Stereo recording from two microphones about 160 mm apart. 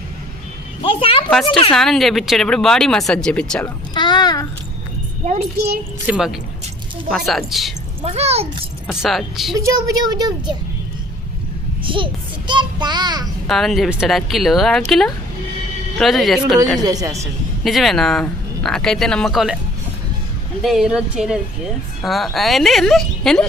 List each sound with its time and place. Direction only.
0.9 s a sound: 35° left (ahead or behind)
1.5 s speech: 35° left (ahead or behind)
1.7 s speech: centre (ahead or behind)
3.9 s a sound: 25° left (ahead or behind)
6.1 s speech: 5° right (ahead or behind)
8.0 s speech: 40° right (ahead or behind)
8.9 s speech: centre (ahead or behind)
9.6 s a child's voice: 20° right (ahead or behind)
11.9 s a child's voice: 30° right (ahead or behind)
13.5 s speech: centre (ahead or behind)
16.8 s a child's voice: 20° right (ahead or behind)
17.6 s speech: centre (ahead or behind)
20.6 s speech: centre (ahead or behind)